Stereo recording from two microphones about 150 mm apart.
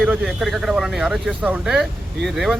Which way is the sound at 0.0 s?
5° right (ahead or behind).